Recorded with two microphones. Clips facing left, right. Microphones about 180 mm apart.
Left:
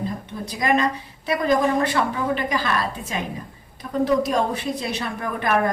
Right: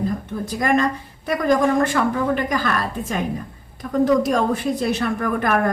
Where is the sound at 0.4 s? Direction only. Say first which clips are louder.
Right 2 dB; 50° right (ahead or behind).